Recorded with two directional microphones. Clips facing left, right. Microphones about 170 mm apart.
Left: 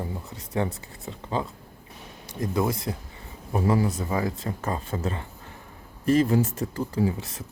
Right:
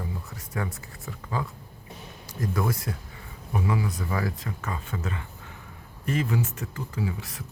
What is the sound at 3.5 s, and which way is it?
Speech, 40° left (ahead or behind).